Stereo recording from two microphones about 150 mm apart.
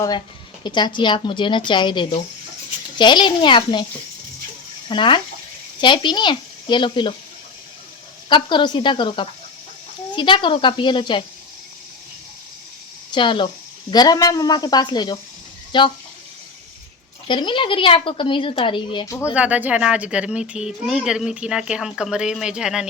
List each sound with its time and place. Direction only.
0.6 s speech: 30° left (ahead or behind)
4.9 s speech: 35° left (ahead or behind)
8.3 s speech: 30° left (ahead or behind)
13.1 s a woman's voice: 30° left (ahead or behind)
17.2 s speech: 35° left (ahead or behind)
19.0 s speech: 20° left (ahead or behind)
19.3 s speech: 10° right (ahead or behind)